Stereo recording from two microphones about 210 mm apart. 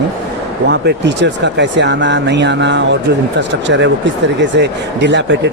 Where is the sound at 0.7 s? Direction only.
55° right (ahead or behind).